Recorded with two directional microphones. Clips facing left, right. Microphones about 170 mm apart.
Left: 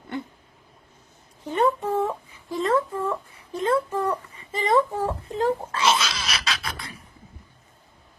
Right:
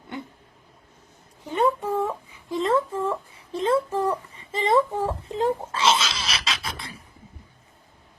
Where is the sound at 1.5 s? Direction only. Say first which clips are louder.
Even; 10° right (ahead or behind).